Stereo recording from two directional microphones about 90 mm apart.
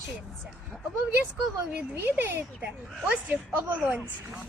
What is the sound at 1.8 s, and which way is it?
A woman's voice, 20° right (ahead or behind).